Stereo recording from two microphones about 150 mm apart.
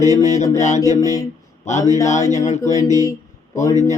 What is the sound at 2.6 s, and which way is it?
Speech, 20° left (ahead or behind).